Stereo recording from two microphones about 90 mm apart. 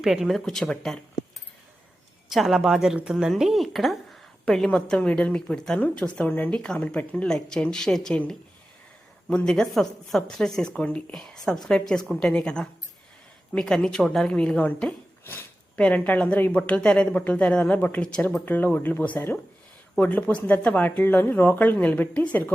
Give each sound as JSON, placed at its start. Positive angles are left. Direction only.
{"t": 0.0, "sound": "a woman's voice", "side_deg": -5}
{"t": 2.3, "sound": "a woman's voice", "side_deg": -5}
{"t": 9.3, "sound": "a woman's voice", "side_deg": 10}
{"t": 15.2, "sound": "speech", "side_deg": 25}
{"t": 15.7, "sound": "a woman's voice", "side_deg": 15}